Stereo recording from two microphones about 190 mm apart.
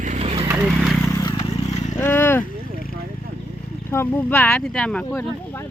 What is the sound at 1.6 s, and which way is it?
Vehicle, 35° left (ahead or behind).